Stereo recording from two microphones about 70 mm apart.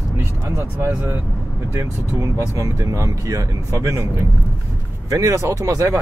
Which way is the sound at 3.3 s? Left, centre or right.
Right.